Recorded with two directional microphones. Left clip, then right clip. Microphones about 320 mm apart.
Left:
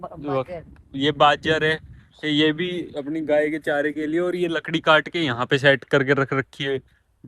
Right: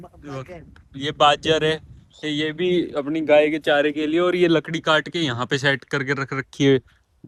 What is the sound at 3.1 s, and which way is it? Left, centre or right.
Speech, centre.